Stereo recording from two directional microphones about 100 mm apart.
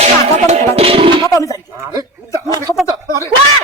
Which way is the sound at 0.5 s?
75° right (ahead or behind).